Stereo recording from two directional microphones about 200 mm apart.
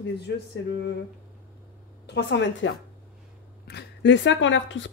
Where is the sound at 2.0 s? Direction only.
60° left (ahead or behind).